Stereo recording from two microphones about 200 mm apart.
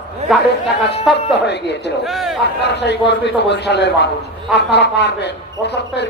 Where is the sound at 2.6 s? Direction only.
60° left (ahead or behind).